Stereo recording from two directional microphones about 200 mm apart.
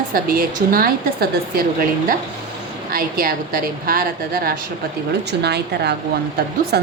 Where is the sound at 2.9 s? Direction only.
45° right (ahead or behind).